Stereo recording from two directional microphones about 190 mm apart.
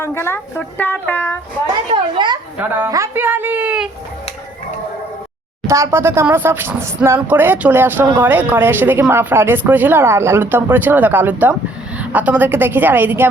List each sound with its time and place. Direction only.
0.0 s speech: 15° left (ahead or behind)
2.1 s a child's voice: 25° right (ahead or behind)
2.6 s speech: 10° right (ahead or behind)
5.6 s speech: 15° right (ahead or behind)